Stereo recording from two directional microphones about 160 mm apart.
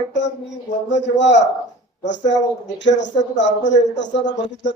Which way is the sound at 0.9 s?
90° left.